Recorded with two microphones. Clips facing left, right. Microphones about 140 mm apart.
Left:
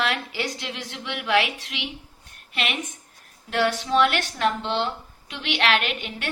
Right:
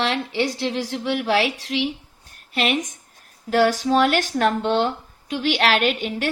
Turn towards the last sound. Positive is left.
turn(degrees=-40)  # may be behind; listen again after turning